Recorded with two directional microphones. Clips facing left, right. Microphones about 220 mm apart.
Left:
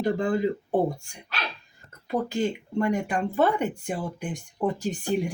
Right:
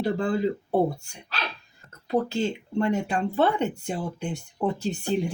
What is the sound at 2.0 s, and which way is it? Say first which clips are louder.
Speech: right 1 dB; 15° left (ahead or behind).